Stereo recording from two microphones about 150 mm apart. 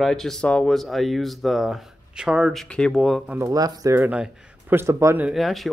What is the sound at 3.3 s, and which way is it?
A man's voice, 20° right (ahead or behind).